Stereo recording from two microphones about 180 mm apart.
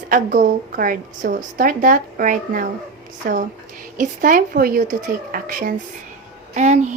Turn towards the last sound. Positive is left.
turn(degrees=-40)  # may be behind; listen again after turning